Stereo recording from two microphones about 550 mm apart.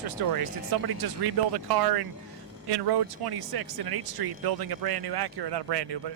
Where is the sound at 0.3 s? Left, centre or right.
Right.